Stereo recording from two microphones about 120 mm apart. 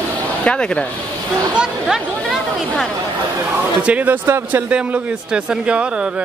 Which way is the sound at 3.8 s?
15° right (ahead or behind).